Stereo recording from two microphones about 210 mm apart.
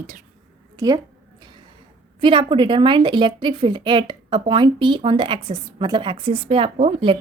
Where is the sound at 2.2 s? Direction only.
25° right (ahead or behind).